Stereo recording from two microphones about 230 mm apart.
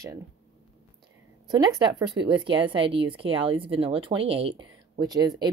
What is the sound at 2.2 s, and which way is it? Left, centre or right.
Speech, right.